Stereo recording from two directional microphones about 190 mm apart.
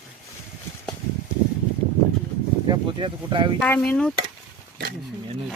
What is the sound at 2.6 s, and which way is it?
Speech, 25° right (ahead or behind).